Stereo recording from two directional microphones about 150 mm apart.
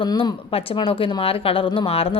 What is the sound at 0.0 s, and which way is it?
Speech, 30° left (ahead or behind).